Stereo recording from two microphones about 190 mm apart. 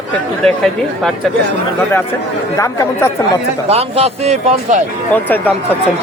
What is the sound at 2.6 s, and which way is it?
Speech, 15° left (ahead or behind).